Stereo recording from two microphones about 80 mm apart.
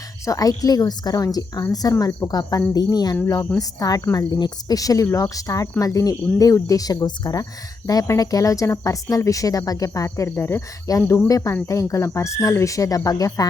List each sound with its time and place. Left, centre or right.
0.3 s speech: left
2.7 s jingle bell: left
3.6 s speech: left
7.9 s speech: left
10.2 s speech: left